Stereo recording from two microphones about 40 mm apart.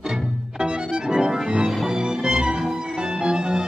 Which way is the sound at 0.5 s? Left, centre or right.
Right.